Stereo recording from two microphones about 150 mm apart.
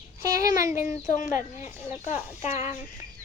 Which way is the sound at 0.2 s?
20° right (ahead or behind).